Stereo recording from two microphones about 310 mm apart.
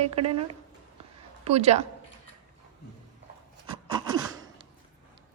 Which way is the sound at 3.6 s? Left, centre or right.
Centre.